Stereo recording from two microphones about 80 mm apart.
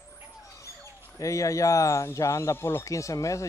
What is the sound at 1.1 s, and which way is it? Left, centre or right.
Speech, left.